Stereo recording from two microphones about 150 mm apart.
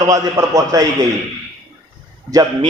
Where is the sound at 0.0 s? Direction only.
20° right (ahead or behind).